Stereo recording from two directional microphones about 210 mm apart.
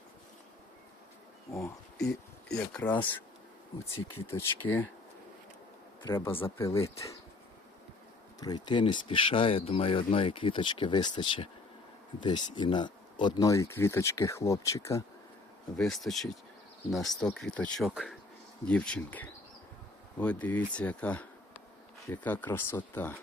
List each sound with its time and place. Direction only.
1.5 s speech: 15° left (ahead or behind)
4.3 s speech: 10° left (ahead or behind)
6.1 s speech: 10° left (ahead or behind)
8.4 s speech: 20° left (ahead or behind)
15.8 s speech: centre (ahead or behind)